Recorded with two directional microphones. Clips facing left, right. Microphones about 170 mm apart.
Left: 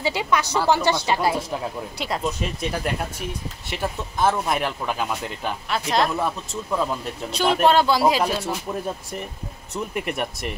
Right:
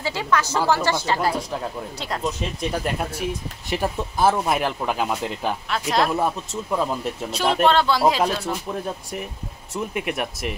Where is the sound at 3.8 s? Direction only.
10° right (ahead or behind); by 8.0 s 10° left (ahead or behind).